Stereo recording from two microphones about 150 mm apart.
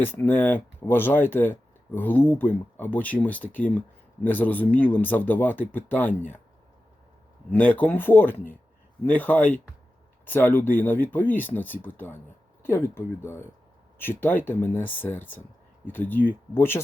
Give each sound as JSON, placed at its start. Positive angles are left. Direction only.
{"t": 0.0, "sound": "speech", "side_deg": 15}
{"t": 7.5, "sound": "speech", "side_deg": 10}